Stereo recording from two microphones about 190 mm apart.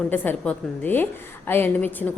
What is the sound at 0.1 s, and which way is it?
A woman's voice, 10° left (ahead or behind).